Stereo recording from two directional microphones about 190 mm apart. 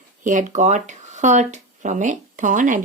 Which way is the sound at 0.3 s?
40° right (ahead or behind).